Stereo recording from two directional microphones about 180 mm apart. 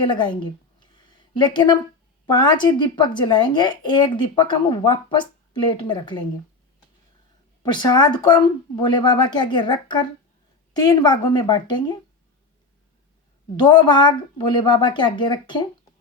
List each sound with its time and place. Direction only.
0.1 s a sound: 25° left (ahead or behind)
2.2 s a woman's voice: 25° left (ahead or behind)
7.6 s a woman's voice: 25° left (ahead or behind)
13.6 s a woman's voice: 25° left (ahead or behind)